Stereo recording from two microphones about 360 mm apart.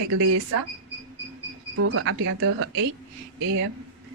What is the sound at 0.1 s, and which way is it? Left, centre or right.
Speech, right.